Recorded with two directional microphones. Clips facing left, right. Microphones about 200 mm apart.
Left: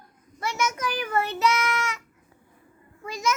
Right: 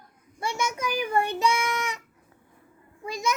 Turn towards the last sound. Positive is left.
turn(degrees=-15)  # may be behind; listen again after turning